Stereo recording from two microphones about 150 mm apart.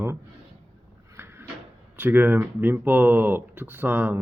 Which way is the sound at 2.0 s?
15° right (ahead or behind).